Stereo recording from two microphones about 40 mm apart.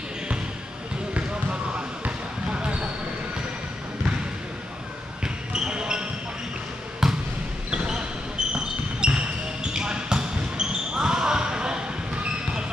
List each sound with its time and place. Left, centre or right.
1.1 s basketball bounce: right
5.2 s basketball bounce: centre
7.0 s basketball bounce: centre